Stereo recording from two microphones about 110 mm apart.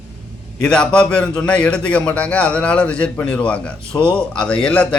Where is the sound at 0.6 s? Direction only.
5° left (ahead or behind).